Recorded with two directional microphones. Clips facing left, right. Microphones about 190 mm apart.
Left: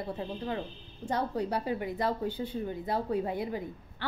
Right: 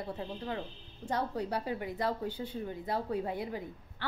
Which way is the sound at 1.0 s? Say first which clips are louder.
Left 3 dB; 20° left (ahead or behind).